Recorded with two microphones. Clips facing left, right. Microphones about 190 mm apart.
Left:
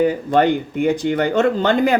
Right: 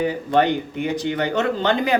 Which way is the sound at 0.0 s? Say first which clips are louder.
Left 4 dB; 50° left (ahead or behind).